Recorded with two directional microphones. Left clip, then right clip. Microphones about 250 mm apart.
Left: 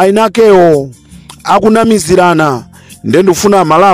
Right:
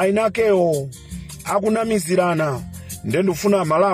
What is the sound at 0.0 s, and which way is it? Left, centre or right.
Speech, left.